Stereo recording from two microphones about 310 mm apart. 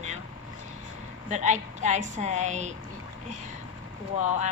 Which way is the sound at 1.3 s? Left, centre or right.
Right.